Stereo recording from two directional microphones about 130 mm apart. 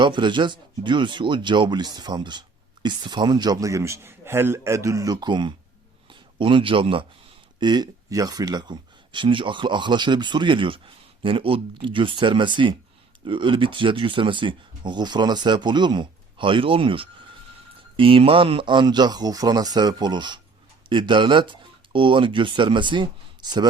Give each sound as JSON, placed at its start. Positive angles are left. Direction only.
{"t": 0.0, "sound": "a man's voice", "side_deg": -35}